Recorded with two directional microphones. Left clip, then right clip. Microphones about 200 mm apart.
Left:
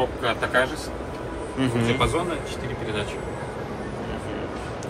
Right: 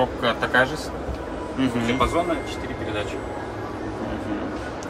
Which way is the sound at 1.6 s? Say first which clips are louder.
Even; 15° right (ahead or behind).